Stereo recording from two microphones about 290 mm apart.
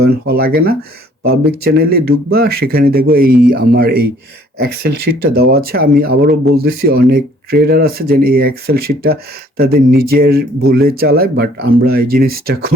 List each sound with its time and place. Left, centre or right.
0.0 s speech: right
1.8 s speech: right